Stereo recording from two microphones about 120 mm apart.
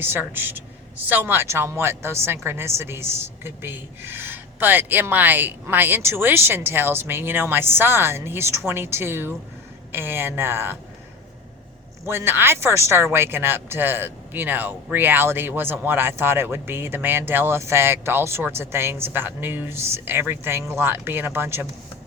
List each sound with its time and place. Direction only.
0.0 s a woman's voice: 15° right (ahead or behind)
12.0 s a woman's voice: 20° right (ahead or behind)